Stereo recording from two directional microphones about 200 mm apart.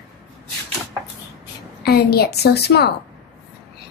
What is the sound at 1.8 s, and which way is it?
A woman's voice, 50° left (ahead or behind).